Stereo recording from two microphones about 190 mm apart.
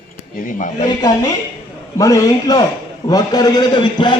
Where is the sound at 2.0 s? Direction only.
15° left (ahead or behind).